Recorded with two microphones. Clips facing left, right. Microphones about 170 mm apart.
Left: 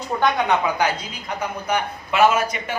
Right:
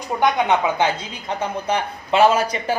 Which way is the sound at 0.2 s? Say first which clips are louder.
Right 2 dB; 20° right (ahead or behind).